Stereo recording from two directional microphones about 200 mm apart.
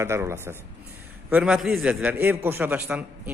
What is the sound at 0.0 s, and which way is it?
A man's voice, 15° right (ahead or behind).